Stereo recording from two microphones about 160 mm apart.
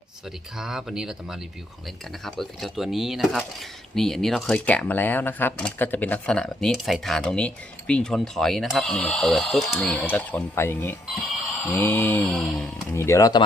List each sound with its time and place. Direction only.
0.5 s speech: centre (ahead or behind)
11.6 s mantra: 10° left (ahead or behind)
12.9 s mantra: 15° left (ahead or behind)